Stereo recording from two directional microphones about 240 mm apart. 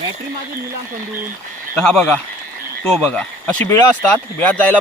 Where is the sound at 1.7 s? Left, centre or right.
Centre.